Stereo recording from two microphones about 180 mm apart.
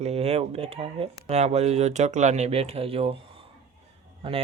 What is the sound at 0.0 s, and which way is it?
Speech, 35° right (ahead or behind).